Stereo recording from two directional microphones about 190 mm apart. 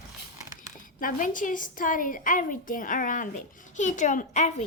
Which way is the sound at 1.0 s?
45° left (ahead or behind).